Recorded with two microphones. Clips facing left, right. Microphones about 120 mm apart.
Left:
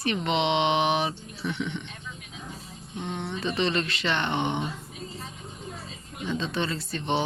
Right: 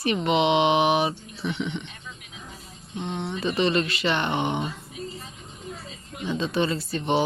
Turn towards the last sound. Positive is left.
turn(degrees=-10)  # may be behind; listen again after turning